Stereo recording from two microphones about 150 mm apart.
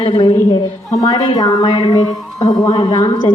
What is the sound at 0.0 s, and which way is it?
A woman's voice, 35° left (ahead or behind).